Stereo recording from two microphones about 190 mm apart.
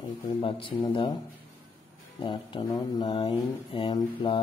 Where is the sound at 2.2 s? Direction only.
25° left (ahead or behind).